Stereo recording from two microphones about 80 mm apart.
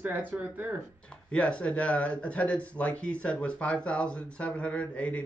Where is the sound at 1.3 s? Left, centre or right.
Centre.